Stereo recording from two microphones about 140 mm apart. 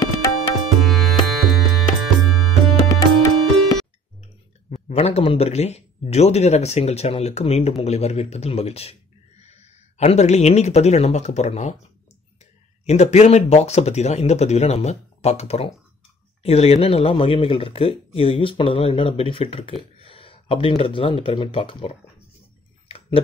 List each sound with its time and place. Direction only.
0.7 s music: centre (ahead or behind)
2.9 s music: 25° left (ahead or behind)
4.8 s speech: 50° left (ahead or behind)
12.8 s speech: 55° left (ahead or behind)